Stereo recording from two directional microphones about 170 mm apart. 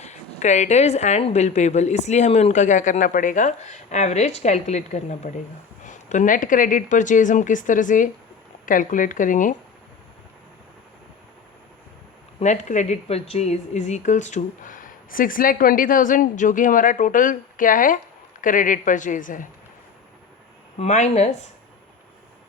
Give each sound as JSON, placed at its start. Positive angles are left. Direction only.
{"t": 0.0, "sound": "speech", "side_deg": 40}
{"t": 12.4, "sound": "speech", "side_deg": 45}
{"t": 20.7, "sound": "speech", "side_deg": 40}